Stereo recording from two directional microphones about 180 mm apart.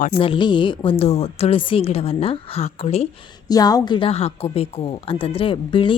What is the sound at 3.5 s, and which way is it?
Speech, 20° left (ahead or behind).